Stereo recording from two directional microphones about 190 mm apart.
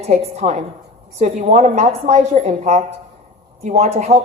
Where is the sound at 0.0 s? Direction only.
35° right (ahead or behind).